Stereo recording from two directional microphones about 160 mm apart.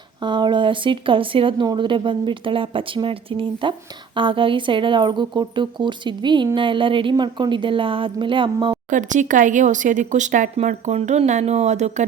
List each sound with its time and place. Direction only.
0.3 s speech: 30° right (ahead or behind)
8.9 s speech: 55° right (ahead or behind)